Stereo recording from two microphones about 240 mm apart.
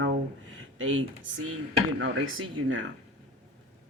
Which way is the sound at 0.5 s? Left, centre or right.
Right.